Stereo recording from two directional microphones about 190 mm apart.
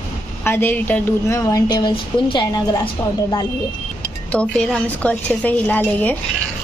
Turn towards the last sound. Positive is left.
turn(degrees=10)  # may be behind; listen again after turning